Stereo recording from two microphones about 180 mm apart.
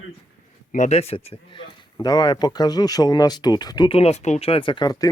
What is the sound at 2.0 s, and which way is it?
Speech, 25° left (ahead or behind).